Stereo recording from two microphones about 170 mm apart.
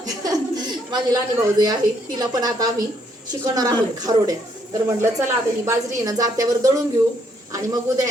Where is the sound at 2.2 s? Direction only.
25° right (ahead or behind).